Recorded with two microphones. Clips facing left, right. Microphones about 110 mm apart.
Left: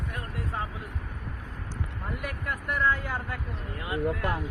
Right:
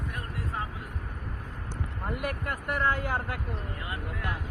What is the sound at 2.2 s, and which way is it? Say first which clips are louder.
Speech: right 1 dB; 50° right (ahead or behind).